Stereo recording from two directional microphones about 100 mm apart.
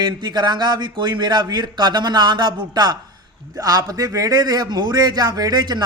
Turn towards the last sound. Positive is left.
turn(degrees=-45)  # may be behind; listen again after turning